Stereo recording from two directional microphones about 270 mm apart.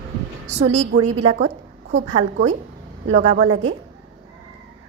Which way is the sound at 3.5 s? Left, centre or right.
Right.